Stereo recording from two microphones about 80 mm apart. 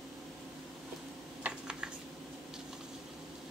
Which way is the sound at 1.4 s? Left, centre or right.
Centre.